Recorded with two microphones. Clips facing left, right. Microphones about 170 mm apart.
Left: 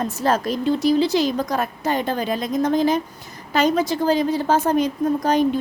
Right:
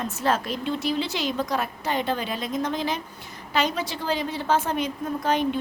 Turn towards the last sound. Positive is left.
turn(degrees=40)  # may be behind; listen again after turning